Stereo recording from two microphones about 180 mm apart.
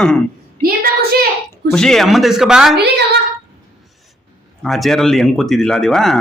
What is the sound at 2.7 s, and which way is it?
Speech, 65° right (ahead or behind).